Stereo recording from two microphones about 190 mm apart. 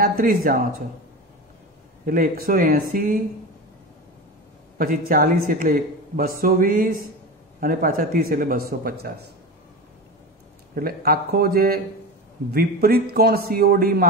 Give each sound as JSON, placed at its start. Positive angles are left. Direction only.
{"t": 0.0, "sound": "a man's voice", "side_deg": -50}
{"t": 2.0, "sound": "a man's voice", "side_deg": -50}
{"t": 4.7, "sound": "a man's voice", "side_deg": -45}
{"t": 10.7, "sound": "a man's voice", "side_deg": -50}